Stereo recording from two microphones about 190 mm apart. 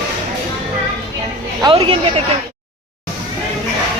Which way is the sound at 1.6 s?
30° right (ahead or behind).